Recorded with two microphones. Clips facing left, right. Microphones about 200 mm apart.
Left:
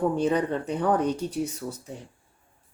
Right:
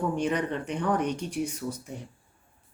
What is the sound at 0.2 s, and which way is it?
Speech, 35° left (ahead or behind).